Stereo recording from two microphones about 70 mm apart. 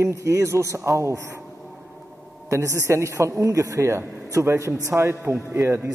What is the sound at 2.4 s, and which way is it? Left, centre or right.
A man's voice, right.